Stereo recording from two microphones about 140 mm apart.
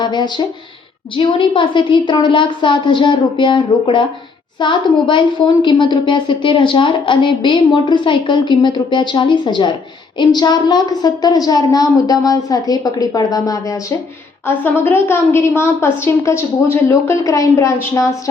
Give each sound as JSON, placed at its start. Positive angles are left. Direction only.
{"t": 0.0, "sound": "a woman's voice", "side_deg": 30}
{"t": 14.4, "sound": "a woman's voice", "side_deg": 15}